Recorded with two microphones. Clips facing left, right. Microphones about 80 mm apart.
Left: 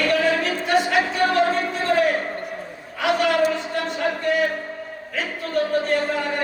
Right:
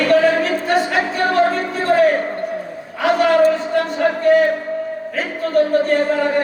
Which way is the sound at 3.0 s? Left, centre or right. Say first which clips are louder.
Right 6 dB; right.